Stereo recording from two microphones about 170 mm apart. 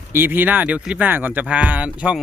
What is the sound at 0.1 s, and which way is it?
Speech, 10° right (ahead or behind).